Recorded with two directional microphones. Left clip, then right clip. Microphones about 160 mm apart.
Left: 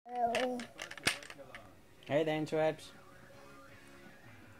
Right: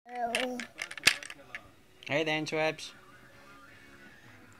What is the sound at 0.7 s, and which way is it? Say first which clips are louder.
Coin: right 6 dB; 25° left (ahead or behind).